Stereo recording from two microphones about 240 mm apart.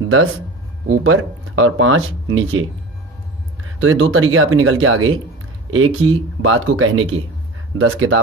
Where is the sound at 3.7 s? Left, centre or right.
Right.